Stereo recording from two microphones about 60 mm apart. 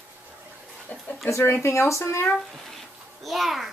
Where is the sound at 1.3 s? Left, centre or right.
Left.